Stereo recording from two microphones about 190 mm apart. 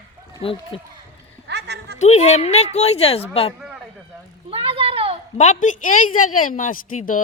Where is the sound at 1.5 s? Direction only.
60° right (ahead or behind).